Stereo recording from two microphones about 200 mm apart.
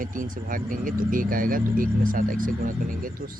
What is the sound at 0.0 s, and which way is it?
Speech, 40° right (ahead or behind).